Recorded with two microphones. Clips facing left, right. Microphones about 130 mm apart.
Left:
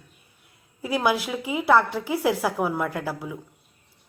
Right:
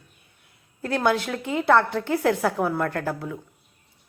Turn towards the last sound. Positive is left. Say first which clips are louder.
# right 2 dB
turn(degrees=5)  # may be behind; listen again after turning